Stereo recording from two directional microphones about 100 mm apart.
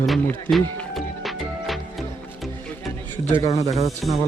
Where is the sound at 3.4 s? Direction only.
90° left.